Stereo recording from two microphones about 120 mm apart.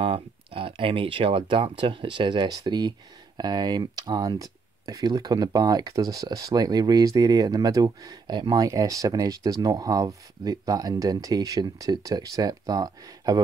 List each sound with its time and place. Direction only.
0.0 s speech: 50° right (ahead or behind); by 13.4 s 30° right (ahead or behind)